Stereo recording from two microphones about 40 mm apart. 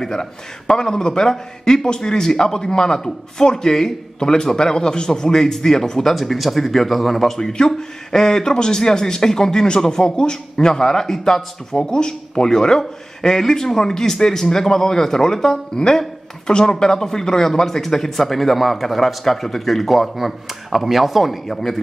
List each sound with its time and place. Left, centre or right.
0.0 s a man's voice: centre
6.1 s a man's voice: centre
21.5 s a man's voice: centre